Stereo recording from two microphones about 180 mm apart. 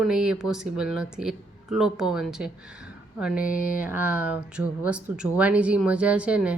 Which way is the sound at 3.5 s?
50° left (ahead or behind).